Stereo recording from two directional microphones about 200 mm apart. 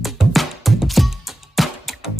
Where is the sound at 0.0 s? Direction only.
Centre (ahead or behind).